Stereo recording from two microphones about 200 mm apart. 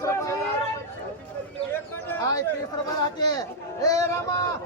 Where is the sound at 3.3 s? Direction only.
15° left (ahead or behind).